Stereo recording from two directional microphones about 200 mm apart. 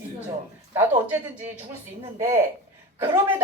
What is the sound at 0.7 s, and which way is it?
Speech, 10° right (ahead or behind).